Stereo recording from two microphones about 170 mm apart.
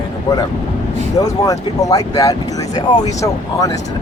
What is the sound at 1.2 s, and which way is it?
Speech, 20° left (ahead or behind).